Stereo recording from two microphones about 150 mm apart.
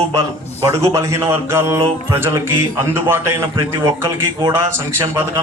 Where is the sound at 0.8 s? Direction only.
20° right (ahead or behind).